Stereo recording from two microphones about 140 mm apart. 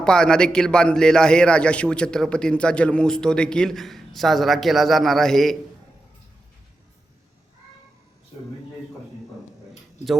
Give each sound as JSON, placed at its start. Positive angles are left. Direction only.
{"t": 0.0, "sound": "a man's voice", "side_deg": 5}